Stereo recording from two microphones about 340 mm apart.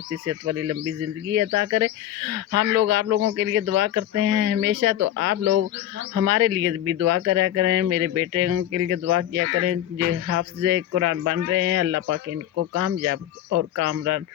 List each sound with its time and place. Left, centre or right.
0.3 s speech: right
2.5 s speech: right
4.9 s speech: right
6.1 s speech: right